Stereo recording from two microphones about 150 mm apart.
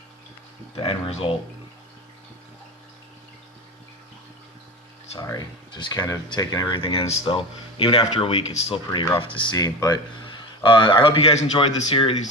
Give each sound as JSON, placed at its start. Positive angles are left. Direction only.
{"t": 0.8, "sound": "speech", "side_deg": 35}
{"t": 5.1, "sound": "speech", "side_deg": 25}